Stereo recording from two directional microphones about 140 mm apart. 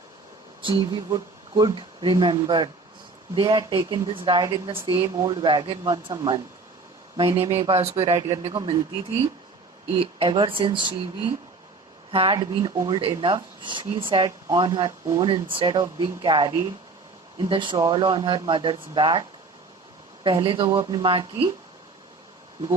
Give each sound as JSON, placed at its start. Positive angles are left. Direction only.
{"t": 0.6, "sound": "a woman's voice", "side_deg": -35}
{"t": 7.2, "sound": "speech", "side_deg": -40}
{"t": 8.5, "sound": "speech", "side_deg": -35}
{"t": 20.2, "sound": "speech", "side_deg": -35}